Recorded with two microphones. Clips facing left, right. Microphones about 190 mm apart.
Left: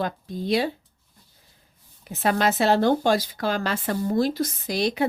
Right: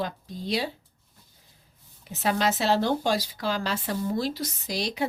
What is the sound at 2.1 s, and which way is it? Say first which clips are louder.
Speech: left 3 dB; 55° left (ahead or behind).